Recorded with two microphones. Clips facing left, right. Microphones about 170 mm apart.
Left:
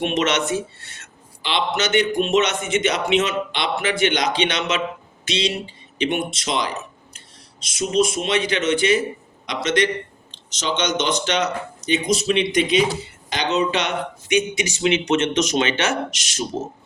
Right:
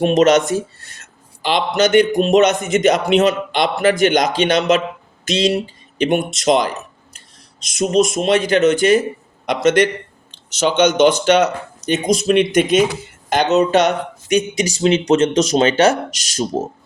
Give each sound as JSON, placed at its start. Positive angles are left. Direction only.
{"t": 0.0, "sound": "speech", "side_deg": -40}